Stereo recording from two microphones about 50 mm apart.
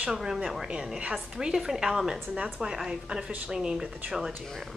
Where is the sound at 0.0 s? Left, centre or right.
Centre.